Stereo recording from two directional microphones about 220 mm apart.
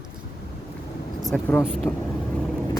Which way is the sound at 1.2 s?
5° left (ahead or behind).